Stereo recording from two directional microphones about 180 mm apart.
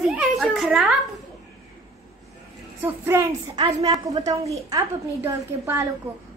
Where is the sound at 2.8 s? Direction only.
15° right (ahead or behind).